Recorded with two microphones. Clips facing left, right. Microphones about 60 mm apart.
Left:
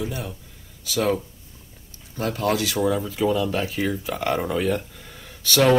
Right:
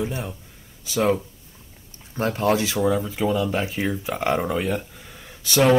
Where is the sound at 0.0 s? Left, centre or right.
Centre.